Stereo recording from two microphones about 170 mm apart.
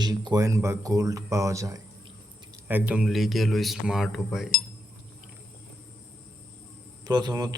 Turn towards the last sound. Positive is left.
turn(degrees=-25)  # may be behind; listen again after turning